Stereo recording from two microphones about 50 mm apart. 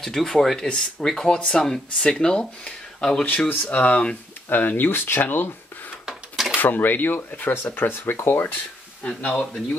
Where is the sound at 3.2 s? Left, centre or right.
Left.